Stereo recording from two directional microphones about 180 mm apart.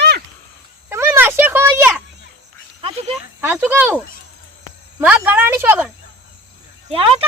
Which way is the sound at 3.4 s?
10° right (ahead or behind).